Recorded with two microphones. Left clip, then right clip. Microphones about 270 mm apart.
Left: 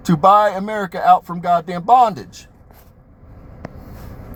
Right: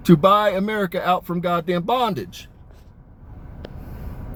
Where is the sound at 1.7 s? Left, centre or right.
Left.